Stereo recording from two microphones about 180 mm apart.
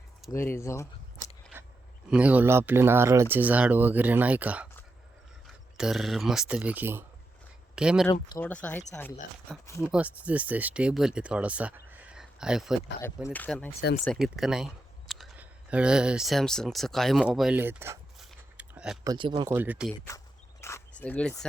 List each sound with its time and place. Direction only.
0.3 s speech: 15° left (ahead or behind)
2.0 s speech: 5° right (ahead or behind)
8.4 s speech: 10° left (ahead or behind)
9.8 s speech: 5° right (ahead or behind)
11.9 s a sound: 5° right (ahead or behind)
13.2 s speech: 10° left (ahead or behind); by 17.9 s 10° right (ahead or behind)
18.2 s a sound: 5° right (ahead or behind)
19.0 s speech: 25° right (ahead or behind)
19.5 s speech: 10° right (ahead or behind)
20.1 s walk: 15° left (ahead or behind)